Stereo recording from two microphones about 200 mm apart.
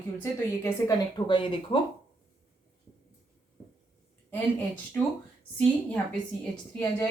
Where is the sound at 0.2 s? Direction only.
15° left (ahead or behind).